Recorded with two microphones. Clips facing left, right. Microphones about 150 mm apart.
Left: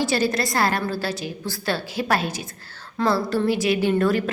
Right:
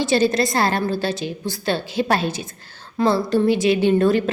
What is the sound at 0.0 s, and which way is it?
A woman's voice, 25° right (ahead or behind).